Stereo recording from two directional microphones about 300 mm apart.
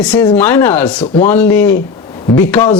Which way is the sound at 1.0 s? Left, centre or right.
Centre.